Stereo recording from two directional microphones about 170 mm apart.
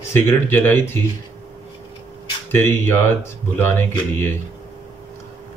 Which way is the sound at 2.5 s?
10° left (ahead or behind).